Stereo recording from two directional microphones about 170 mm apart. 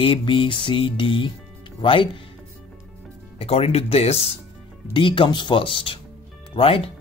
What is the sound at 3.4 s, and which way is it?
Speech, 35° left (ahead or behind).